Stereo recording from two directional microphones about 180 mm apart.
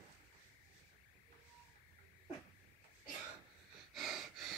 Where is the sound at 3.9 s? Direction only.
Centre (ahead or behind).